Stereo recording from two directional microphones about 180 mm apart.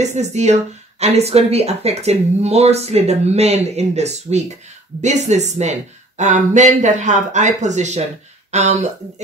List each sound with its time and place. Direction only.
0.1 s speech: 40° right (ahead or behind)